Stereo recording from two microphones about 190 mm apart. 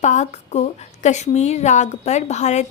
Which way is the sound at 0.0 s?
40° left (ahead or behind).